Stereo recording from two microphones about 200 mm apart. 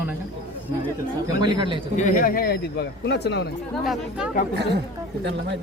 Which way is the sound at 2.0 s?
45° left (ahead or behind).